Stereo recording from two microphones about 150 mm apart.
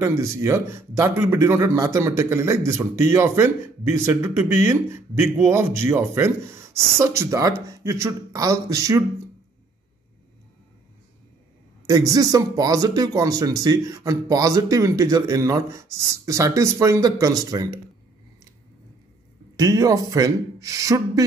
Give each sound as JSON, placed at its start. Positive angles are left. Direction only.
{"t": 0.0, "sound": "a man's voice", "side_deg": -20}
{"t": 11.8, "sound": "a man's voice", "side_deg": -25}
{"t": 19.5, "sound": "a man's voice", "side_deg": -25}